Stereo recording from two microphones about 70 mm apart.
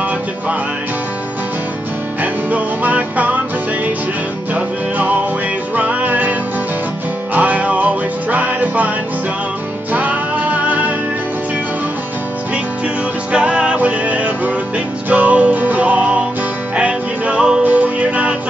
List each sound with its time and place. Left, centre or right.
2.5 s music: right
4.6 s music: right
7.3 s music: right
9.9 s music: right
13.3 s music: centre